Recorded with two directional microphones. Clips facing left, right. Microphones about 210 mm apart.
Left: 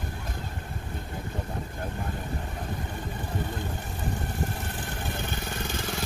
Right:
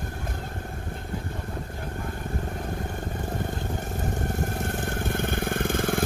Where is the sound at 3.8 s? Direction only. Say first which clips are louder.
Right 4 dB; 45° right (ahead or behind).